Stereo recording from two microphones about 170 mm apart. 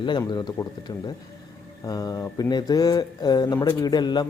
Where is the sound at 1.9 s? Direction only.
20° left (ahead or behind).